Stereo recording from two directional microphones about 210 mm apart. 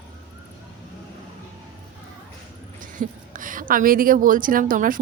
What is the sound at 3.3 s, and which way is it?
A woman's voice, 40° right (ahead or behind).